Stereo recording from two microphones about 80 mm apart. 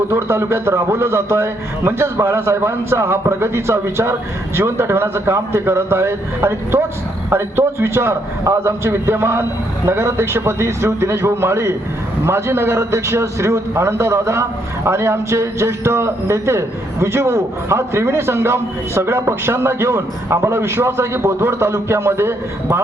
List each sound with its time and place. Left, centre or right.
0.1 s a man's voice: right